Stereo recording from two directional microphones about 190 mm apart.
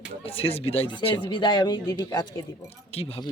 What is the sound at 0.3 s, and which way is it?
A man's voice, 30° left (ahead or behind).